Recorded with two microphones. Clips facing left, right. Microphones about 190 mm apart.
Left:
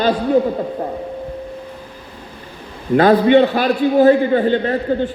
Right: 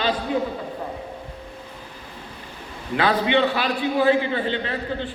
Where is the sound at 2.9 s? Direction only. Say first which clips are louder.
Left 9 dB; 45° left (ahead or behind).